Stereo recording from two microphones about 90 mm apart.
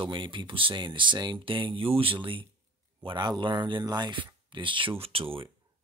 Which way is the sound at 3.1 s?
55° right (ahead or behind).